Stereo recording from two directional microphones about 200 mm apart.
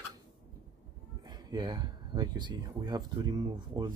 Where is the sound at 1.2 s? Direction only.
20° right (ahead or behind).